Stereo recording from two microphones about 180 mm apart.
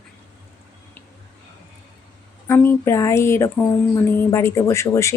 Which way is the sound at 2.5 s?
10° left (ahead or behind).